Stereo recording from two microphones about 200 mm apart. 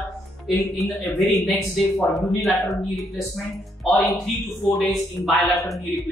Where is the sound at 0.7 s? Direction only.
Centre (ahead or behind).